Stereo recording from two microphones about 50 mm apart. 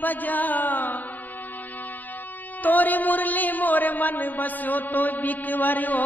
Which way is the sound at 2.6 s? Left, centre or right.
Left.